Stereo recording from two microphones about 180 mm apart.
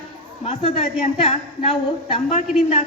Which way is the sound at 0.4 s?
40° left (ahead or behind).